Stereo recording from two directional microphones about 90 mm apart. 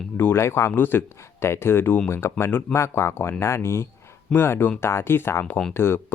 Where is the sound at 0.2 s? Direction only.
25° left (ahead or behind).